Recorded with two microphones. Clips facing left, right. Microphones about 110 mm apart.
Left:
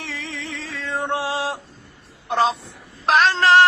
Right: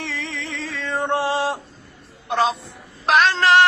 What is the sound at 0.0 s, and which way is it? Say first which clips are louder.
Music: right 2 dB; 10° left (ahead or behind).